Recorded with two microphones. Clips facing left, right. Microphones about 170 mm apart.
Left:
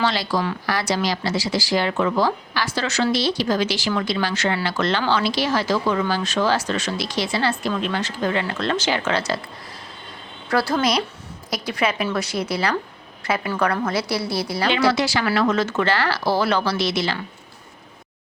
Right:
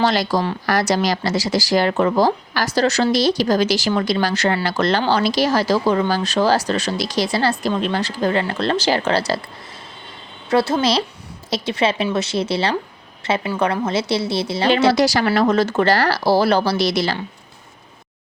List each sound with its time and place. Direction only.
0.0 s speech: 45° right (ahead or behind)
10.5 s a woman's voice: 25° right (ahead or behind)
14.9 s speech: 40° right (ahead or behind)